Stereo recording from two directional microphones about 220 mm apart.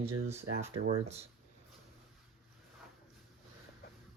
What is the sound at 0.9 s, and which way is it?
Speech, 30° right (ahead or behind).